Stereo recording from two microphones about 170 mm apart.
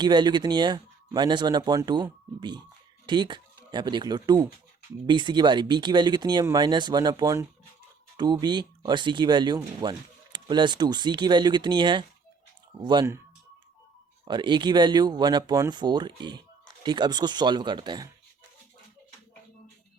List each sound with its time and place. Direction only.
0.0 s speech: 25° right (ahead or behind)
14.3 s speech: 25° right (ahead or behind)